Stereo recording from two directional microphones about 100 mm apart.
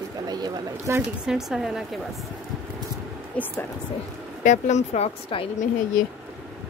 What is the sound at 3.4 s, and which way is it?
Speech, 10° left (ahead or behind).